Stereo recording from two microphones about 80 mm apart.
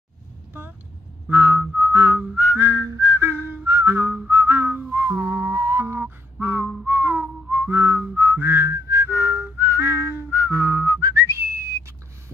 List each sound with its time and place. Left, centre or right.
1.3 s whistling: right
2.6 s whistling: right
4.9 s music: right
5.2 s music: right
6.4 s whistling: right